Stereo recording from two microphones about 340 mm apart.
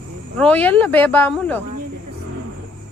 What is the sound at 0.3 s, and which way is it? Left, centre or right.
Speech, centre.